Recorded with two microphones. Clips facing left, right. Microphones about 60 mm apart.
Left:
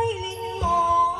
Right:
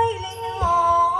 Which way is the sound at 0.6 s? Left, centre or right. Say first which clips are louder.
Right 2 dB; right.